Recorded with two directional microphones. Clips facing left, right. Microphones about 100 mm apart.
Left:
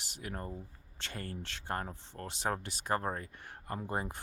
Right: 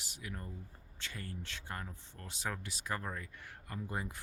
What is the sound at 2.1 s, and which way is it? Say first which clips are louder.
Speech: left 6 dB; 45° left (ahead or behind).